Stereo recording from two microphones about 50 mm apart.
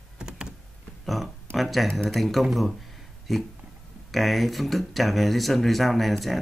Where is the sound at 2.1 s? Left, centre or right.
Centre.